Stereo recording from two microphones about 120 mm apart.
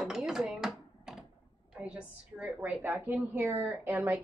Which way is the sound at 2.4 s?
15° right (ahead or behind).